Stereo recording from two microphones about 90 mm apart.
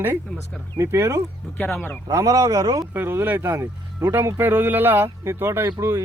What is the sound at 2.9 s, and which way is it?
Speech, 25° right (ahead or behind).